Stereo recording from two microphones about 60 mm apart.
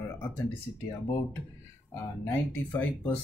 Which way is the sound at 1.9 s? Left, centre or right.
Left.